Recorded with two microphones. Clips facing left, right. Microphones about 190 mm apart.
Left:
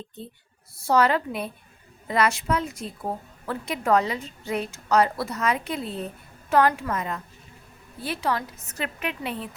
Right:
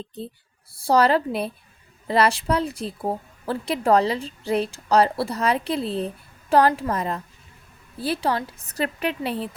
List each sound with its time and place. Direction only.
0.7 s a woman's voice: 30° right (ahead or behind)